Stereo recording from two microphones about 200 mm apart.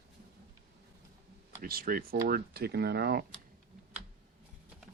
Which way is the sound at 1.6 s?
50° right (ahead or behind).